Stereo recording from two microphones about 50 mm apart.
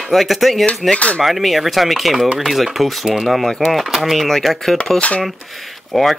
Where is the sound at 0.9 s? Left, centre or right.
Left.